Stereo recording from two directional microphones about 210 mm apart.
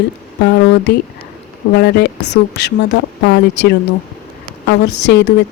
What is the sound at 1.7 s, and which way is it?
A woman's voice, 50° left (ahead or behind).